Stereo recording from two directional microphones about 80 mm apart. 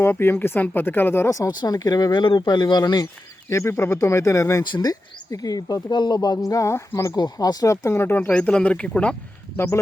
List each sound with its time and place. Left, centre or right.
0.0 s speech: left
1.5 s speech: left
3.5 s speech: left
4.6 s speech: left
6.5 s speech: left
7.2 s speech: left
8.1 s speech: centre